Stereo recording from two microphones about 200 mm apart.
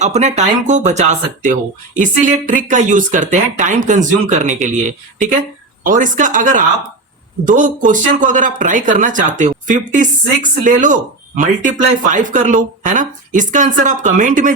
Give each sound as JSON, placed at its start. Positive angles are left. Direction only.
{"t": 0.0, "sound": "speech", "side_deg": -35}